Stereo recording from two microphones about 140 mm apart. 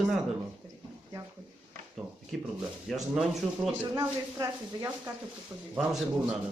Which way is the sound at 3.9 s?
25° right (ahead or behind).